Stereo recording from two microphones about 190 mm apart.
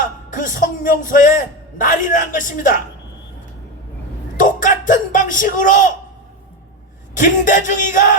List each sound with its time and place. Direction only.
0.0 s a man's voice: 40° left (ahead or behind)
4.4 s speech: 45° left (ahead or behind)
7.1 s speech: 40° left (ahead or behind)